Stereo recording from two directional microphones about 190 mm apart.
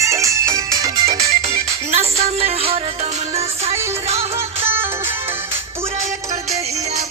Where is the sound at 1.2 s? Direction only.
30° right (ahead or behind).